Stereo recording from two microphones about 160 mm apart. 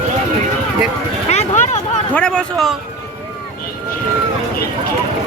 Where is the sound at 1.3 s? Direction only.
45° left (ahead or behind).